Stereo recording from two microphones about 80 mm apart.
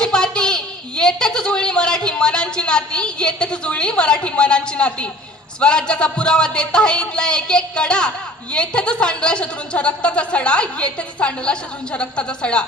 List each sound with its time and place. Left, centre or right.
0.0 s a woman's voice: centre